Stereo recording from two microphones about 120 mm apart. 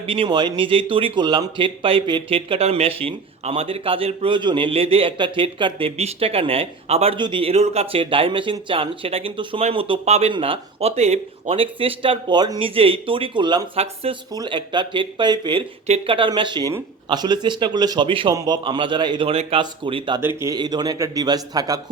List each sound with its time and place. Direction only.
0.0 s speech: 45° right (ahead or behind)
6.0 s speech: 55° right (ahead or behind)
7.2 s speech: 45° right (ahead or behind)
10.1 s speech: 60° right (ahead or behind); by 12.6 s 35° right (ahead or behind)
12.6 s speech: 50° right (ahead or behind)
13.7 s speech: 55° right (ahead or behind)
14.3 s a man's voice: 40° right (ahead or behind)
19.3 s speech: 55° right (ahead or behind)
20.2 s speech: 25° right (ahead or behind)
20.6 s a man's voice: 35° right (ahead or behind)